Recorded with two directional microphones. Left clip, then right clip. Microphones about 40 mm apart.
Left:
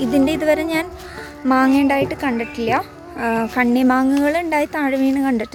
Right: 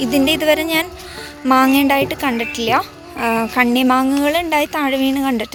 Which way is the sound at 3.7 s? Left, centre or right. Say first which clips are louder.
Right 2 dB; left.